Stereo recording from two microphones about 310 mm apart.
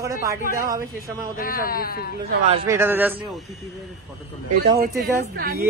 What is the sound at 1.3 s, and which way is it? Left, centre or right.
Speech, left.